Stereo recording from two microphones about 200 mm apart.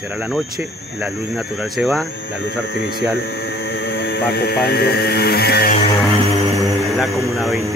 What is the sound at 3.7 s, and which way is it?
Speech, 55° left (ahead or behind).